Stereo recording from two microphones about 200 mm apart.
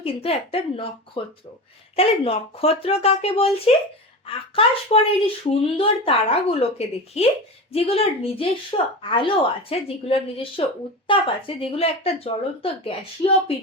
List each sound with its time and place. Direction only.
0.0 s speech: 30° left (ahead or behind)